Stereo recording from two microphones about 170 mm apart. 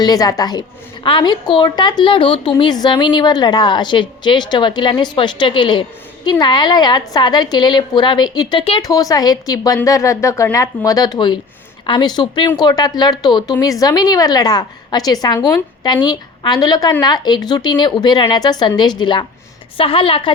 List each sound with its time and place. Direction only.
0.0 s a woman's voice: 20° left (ahead or behind)